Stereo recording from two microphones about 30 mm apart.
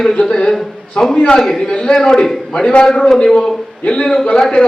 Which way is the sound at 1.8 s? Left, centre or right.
Left.